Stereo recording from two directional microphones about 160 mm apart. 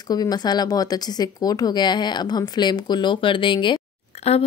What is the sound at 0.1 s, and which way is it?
Speech, 25° left (ahead or behind).